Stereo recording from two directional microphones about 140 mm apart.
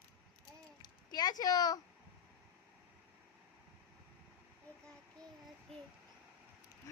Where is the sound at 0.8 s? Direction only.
30° left (ahead or behind).